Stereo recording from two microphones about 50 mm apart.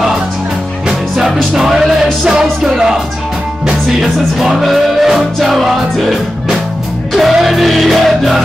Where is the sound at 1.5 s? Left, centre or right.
Centre.